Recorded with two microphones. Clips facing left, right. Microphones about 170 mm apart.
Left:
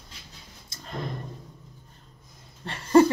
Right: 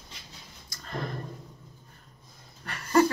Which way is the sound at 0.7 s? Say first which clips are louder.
Left 3 dB; 25° left (ahead or behind).